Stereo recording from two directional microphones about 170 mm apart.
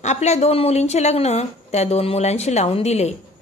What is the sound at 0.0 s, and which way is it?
A woman's voice, 40° left (ahead or behind).